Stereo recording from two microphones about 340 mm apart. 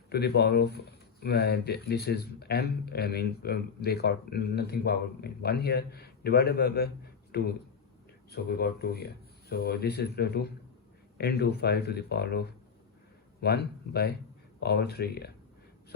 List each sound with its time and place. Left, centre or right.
0.1 s a man's voice: left